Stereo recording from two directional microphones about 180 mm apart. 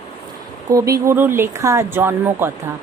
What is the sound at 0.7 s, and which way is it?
Speech, 20° right (ahead or behind).